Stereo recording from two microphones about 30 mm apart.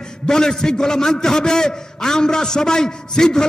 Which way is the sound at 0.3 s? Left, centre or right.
Centre.